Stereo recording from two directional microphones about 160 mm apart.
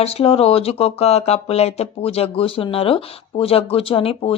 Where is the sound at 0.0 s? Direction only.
40° left (ahead or behind).